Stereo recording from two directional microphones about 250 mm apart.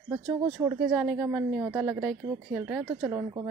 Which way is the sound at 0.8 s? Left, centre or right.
Centre.